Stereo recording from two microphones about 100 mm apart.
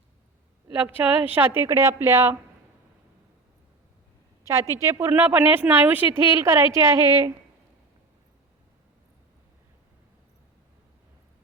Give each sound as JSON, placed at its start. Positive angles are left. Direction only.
{"t": 0.8, "sound": "speech", "side_deg": -15}
{"t": 4.4, "sound": "speech", "side_deg": -30}